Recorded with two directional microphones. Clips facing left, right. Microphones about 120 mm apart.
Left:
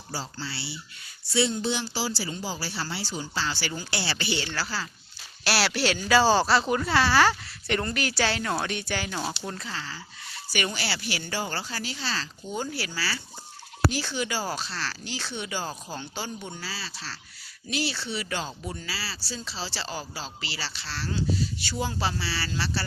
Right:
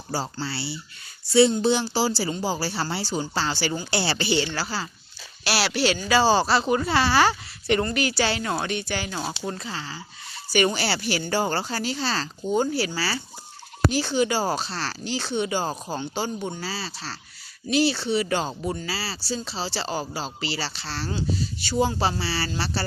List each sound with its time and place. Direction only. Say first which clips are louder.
0.1 s speech: right 6 dB; 40° right (ahead or behind); by 4.9 s 20° right (ahead or behind)
5.5 s speech: right 2 dB; centre (ahead or behind)
9.6 s speech: right 3 dB; 20° right (ahead or behind)
10.5 s speech: right 8 dB; 30° right (ahead or behind)